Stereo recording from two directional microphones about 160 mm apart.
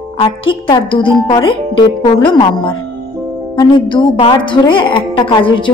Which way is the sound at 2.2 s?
30° left (ahead or behind).